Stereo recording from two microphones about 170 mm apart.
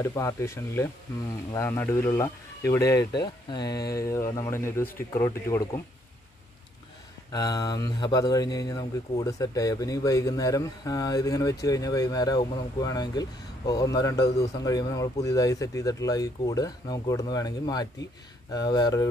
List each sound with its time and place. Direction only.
0.1 s speech: 15° left (ahead or behind)
7.3 s speech: 25° left (ahead or behind)